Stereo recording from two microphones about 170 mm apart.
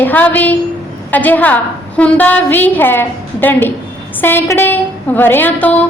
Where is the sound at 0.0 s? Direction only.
10° left (ahead or behind).